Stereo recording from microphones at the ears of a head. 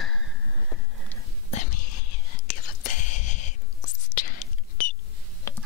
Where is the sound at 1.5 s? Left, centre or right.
Left.